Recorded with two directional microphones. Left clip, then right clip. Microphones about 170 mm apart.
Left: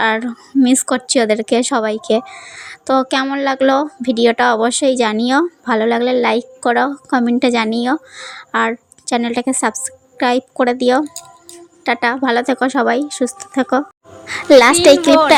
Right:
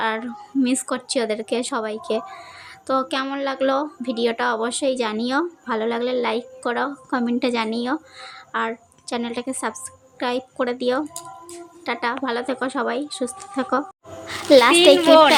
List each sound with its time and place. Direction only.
0.0 s a woman's voice: 40° left (ahead or behind)